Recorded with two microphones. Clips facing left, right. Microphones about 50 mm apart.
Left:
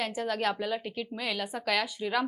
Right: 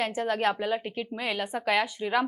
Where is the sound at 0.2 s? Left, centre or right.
Right.